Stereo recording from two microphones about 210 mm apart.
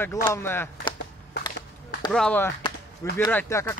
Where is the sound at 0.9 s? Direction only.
25° left (ahead or behind).